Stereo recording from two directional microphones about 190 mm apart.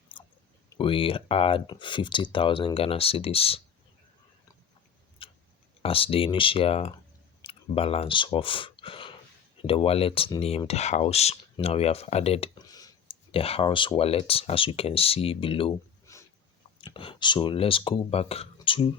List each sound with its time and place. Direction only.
0.1 s chewing: 25° left (ahead or behind)
0.8 s speech: 30° left (ahead or behind)
5.2 s tick-tock: 30° left (ahead or behind)
5.8 s speech: 30° left (ahead or behind)
12.5 s speech: 20° left (ahead or behind)
16.1 s a sound: 15° left (ahead or behind)
16.7 s speech: 25° left (ahead or behind)